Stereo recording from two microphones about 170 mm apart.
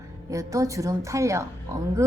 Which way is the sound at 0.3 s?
20° right (ahead or behind).